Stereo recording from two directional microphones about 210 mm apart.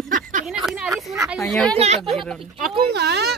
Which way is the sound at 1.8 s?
30° right (ahead or behind).